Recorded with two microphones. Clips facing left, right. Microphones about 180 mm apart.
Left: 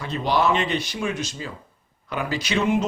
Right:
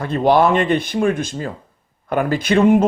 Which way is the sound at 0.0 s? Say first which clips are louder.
Right 8 dB; 50° right (ahead or behind).